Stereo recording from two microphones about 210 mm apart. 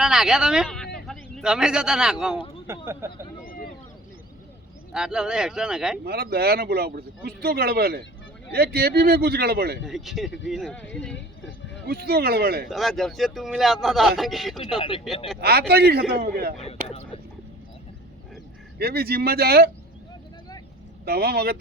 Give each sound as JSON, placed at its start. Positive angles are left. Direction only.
{"t": 0.0, "sound": "speech", "side_deg": -5}
{"t": 4.9, "sound": "speech", "side_deg": -5}
{"t": 6.1, "sound": "speech", "side_deg": -50}
{"t": 9.8, "sound": "speech", "side_deg": 0}
{"t": 11.9, "sound": "speech", "side_deg": -45}
{"t": 12.6, "sound": "speech", "side_deg": 0}
{"t": 15.4, "sound": "speech", "side_deg": -50}
{"t": 16.6, "sound": "speech", "side_deg": 30}
{"t": 18.8, "sound": "speech", "side_deg": -50}
{"t": 21.0, "sound": "speech", "side_deg": -50}